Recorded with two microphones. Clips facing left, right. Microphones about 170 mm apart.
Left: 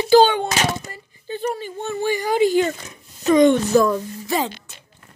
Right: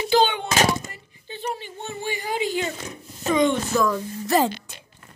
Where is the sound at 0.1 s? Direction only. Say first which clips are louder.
Left 7 dB; 40° left (ahead or behind).